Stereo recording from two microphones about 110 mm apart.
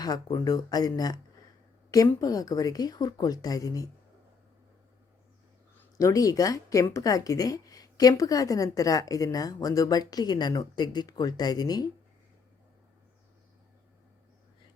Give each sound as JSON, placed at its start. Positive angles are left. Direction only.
{"t": 0.0, "sound": "a woman's voice", "side_deg": 35}
{"t": 6.0, "sound": "a woman's voice", "side_deg": 30}